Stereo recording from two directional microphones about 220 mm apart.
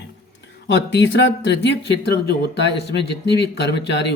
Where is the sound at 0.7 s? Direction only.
55° left (ahead or behind).